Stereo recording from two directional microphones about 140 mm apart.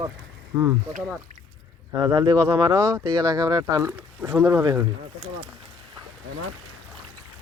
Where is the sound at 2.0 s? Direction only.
25° right (ahead or behind).